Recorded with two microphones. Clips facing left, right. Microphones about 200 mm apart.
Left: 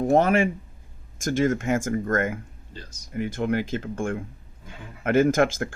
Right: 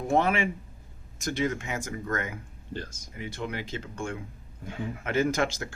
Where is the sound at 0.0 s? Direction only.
45° left (ahead or behind).